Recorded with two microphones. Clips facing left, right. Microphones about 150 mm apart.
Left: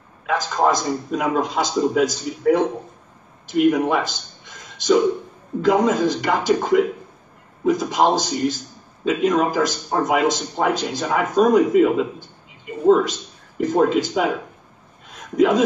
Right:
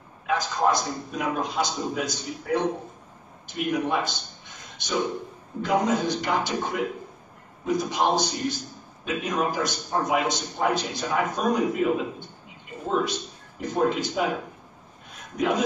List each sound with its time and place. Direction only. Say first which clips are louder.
0.3 s a man's voice: left 4 dB; 90° left
5.6 s a man's voice: left 6 dB; 90° left
15.3 s a man's voice: left 8 dB; 90° left